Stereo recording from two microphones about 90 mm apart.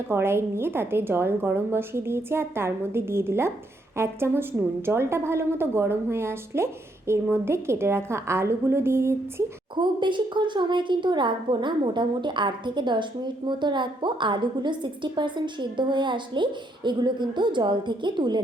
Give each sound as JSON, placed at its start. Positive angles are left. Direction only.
{"t": 0.1, "sound": "a woman's voice", "side_deg": -30}
{"t": 9.7, "sound": "a woman's voice", "side_deg": -60}